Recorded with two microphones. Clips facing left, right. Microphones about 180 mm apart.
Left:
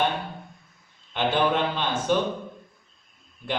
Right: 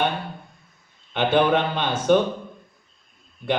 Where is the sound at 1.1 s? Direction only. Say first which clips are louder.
Right 4 dB; 60° right (ahead or behind).